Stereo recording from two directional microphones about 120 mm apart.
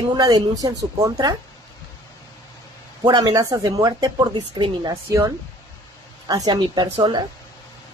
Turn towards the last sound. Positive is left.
turn(degrees=-40)  # may be behind; listen again after turning